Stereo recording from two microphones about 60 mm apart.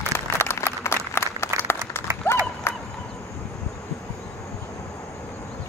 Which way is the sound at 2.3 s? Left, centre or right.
Left.